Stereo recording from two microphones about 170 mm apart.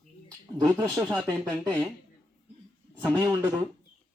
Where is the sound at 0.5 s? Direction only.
5° left (ahead or behind).